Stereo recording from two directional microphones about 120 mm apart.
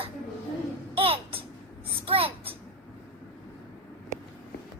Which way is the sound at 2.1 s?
50° right (ahead or behind).